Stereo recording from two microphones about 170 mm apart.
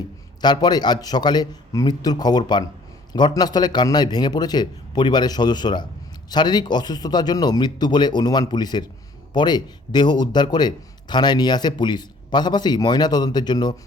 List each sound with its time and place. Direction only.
0.4 s speech: 25° left (ahead or behind)